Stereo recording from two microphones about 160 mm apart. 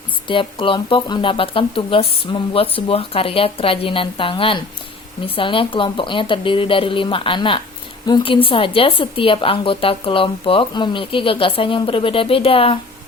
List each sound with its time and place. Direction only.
0.3 s speech: 30° left (ahead or behind)